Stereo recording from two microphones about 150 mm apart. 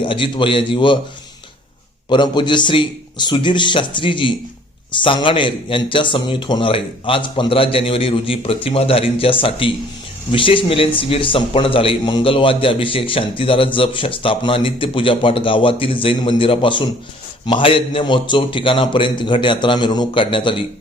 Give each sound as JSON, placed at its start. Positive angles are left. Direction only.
{"t": 0.0, "sound": "a man's voice", "side_deg": 35}
{"t": 2.0, "sound": "a man's voice", "side_deg": 30}